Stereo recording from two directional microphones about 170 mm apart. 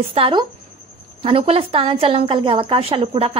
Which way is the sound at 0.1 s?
30° right (ahead or behind).